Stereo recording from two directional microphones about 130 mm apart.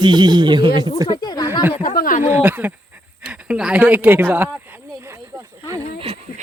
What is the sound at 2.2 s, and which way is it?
Speech, 15° right (ahead or behind).